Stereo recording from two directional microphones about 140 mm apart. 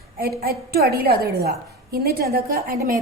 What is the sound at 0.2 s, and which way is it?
A woman's voice, 90° right.